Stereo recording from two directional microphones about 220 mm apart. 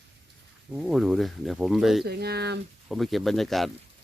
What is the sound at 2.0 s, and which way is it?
Speech, 45° right (ahead or behind).